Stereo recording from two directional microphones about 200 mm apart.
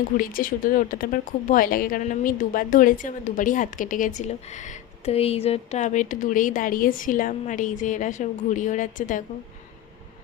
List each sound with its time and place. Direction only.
0.2 s a woman's voice: 45° left (ahead or behind)